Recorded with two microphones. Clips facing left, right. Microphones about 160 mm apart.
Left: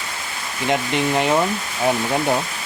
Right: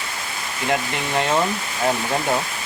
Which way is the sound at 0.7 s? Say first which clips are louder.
Left 3 dB; 20° left (ahead or behind).